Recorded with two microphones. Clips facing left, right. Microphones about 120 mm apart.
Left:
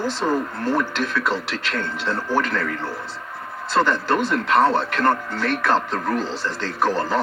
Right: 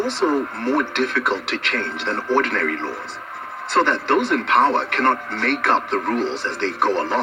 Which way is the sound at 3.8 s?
25° right (ahead or behind).